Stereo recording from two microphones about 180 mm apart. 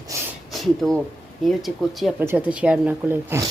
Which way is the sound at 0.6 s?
Centre (ahead or behind).